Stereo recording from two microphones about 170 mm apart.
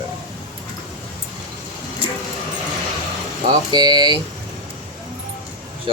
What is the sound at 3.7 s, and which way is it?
Speech, 25° right (ahead or behind).